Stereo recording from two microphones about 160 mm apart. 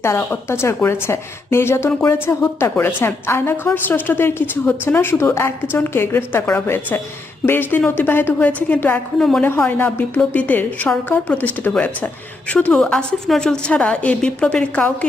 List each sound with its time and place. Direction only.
0.0 s a woman's voice: 15° left (ahead or behind)